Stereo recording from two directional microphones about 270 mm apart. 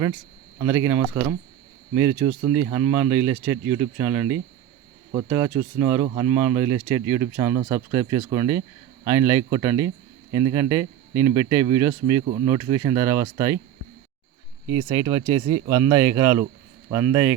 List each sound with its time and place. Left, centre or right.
0.6 s speech: centre
14.7 s speech: centre